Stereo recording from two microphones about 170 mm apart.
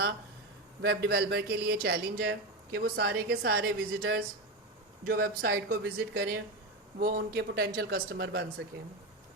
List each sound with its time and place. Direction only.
0.8 s speech: 75° right (ahead or behind)